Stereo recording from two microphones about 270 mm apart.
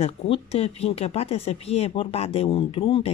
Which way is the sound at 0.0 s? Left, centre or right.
Left.